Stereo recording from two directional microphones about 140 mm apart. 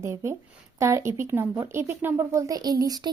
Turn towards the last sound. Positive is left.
turn(degrees=-25)  # may be behind; listen again after turning